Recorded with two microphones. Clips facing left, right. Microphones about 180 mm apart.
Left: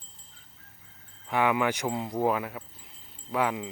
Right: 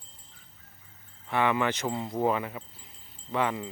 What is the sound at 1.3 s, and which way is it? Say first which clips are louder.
Speech: left 1 dB; 10° left (ahead or behind).